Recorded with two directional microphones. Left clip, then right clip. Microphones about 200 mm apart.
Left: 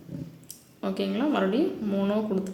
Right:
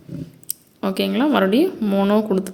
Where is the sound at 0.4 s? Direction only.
35° right (ahead or behind).